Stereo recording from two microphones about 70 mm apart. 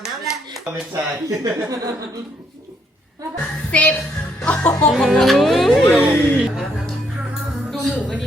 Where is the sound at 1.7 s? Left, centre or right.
Right.